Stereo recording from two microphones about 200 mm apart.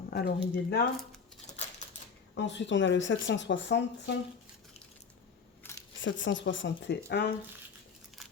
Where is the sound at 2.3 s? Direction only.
65° left (ahead or behind).